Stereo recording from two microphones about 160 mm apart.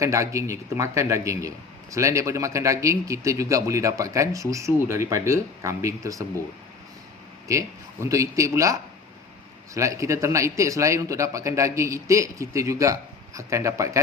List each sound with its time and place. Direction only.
0.0 s a man's voice: 20° right (ahead or behind)
8.0 s a man's voice: 20° right (ahead or behind)